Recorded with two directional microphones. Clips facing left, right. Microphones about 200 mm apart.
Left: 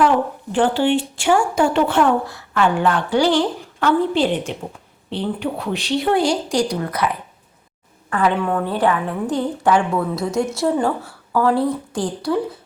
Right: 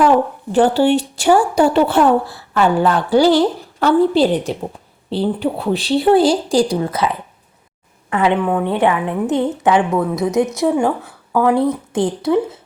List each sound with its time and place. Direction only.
0.5 s speech: 40° right (ahead or behind)
8.1 s a woman's voice: 20° right (ahead or behind)